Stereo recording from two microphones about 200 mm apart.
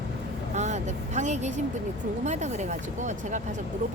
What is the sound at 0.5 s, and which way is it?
Speech, 35° right (ahead or behind).